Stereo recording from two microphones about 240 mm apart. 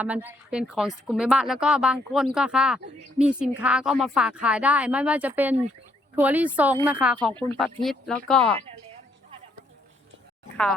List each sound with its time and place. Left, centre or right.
0.0 s speech: centre